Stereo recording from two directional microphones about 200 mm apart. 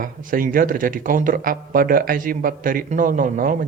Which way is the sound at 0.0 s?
45° right (ahead or behind).